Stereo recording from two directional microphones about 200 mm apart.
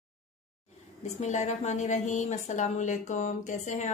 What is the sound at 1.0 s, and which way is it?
A woman's voice, 35° left (ahead or behind).